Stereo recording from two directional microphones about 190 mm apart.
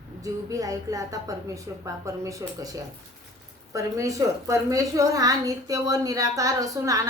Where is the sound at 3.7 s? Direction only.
15° right (ahead or behind).